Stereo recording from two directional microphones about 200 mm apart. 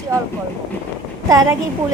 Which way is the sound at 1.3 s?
15° right (ahead or behind).